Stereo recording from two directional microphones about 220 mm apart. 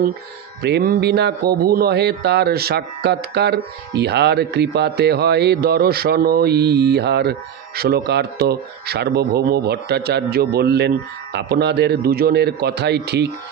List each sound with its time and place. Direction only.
0.6 s speech: 50° right (ahead or behind)